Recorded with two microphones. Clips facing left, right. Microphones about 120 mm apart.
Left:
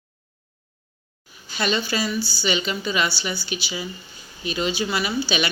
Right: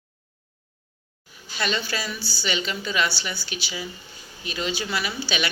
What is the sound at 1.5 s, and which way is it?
A woman's voice, 20° left (ahead or behind).